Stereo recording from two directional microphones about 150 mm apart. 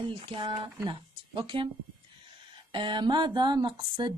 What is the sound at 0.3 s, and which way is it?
Speech, 35° right (ahead or behind).